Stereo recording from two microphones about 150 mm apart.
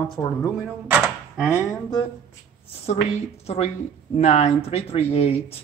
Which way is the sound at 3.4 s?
45° left (ahead or behind).